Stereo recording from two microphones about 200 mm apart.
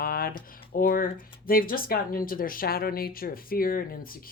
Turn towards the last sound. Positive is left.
turn(degrees=45)  # may be behind; listen again after turning